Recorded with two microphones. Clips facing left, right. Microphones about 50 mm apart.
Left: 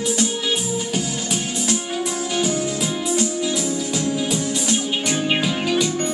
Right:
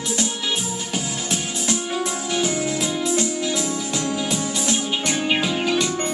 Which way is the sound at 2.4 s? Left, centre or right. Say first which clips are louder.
Left 1 dB; right.